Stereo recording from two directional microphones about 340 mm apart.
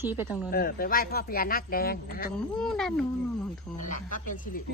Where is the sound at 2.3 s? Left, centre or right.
Centre.